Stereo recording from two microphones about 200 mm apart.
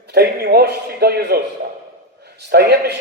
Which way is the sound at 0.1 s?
55° right (ahead or behind).